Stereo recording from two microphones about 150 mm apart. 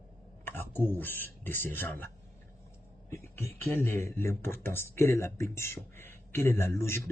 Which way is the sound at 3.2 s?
15° left (ahead or behind).